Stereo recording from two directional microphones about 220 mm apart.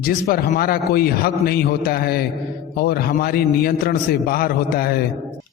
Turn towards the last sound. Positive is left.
turn(degrees=45)  # may be behind; listen again after turning